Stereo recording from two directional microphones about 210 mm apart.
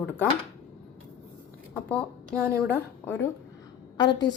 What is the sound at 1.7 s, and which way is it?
Speech, 5° left (ahead or behind).